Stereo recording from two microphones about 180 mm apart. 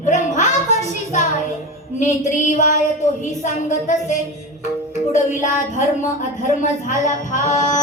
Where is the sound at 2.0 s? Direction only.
40° left (ahead or behind).